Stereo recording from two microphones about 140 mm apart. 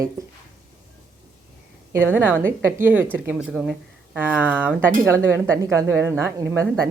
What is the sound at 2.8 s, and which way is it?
A woman's voice, 10° right (ahead or behind).